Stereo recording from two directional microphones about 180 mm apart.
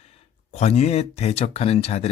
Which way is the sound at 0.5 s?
35° left (ahead or behind).